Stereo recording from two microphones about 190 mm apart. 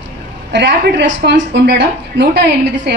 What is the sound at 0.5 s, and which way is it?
A woman's voice, 70° right (ahead or behind).